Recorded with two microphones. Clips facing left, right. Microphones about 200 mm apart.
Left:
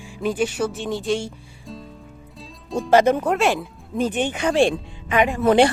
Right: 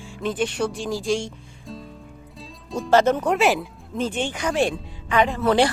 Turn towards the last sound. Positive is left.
turn(degrees=20)  # may be behind; listen again after turning